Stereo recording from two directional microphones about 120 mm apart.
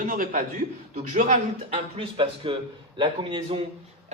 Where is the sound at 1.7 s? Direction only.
50° right (ahead or behind).